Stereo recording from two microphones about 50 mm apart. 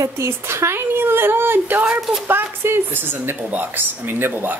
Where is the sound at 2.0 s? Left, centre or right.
Centre.